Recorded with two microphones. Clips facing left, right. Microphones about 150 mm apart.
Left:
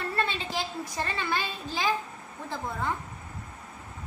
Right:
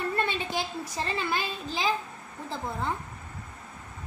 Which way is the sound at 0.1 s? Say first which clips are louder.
Right 1 dB; 15° right (ahead or behind).